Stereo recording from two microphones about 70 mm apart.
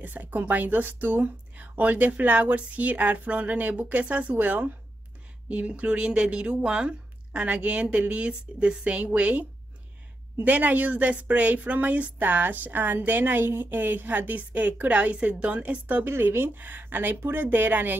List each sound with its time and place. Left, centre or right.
0.0 s speech: right